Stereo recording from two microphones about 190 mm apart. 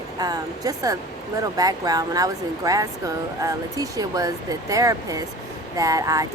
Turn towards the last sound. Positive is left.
turn(degrees=-15)  # may be behind; listen again after turning